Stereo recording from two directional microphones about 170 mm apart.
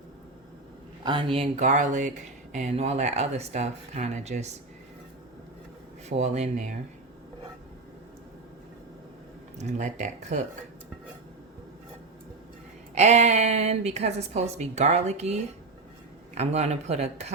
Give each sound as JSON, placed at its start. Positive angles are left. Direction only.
{"t": 1.0, "sound": "speech", "side_deg": -30}
{"t": 6.1, "sound": "speech", "side_deg": -40}
{"t": 9.6, "sound": "speech", "side_deg": -45}
{"t": 12.9, "sound": "speech", "side_deg": -40}